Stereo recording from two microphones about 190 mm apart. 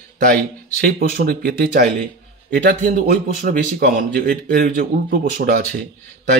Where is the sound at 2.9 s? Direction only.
45° right (ahead or behind).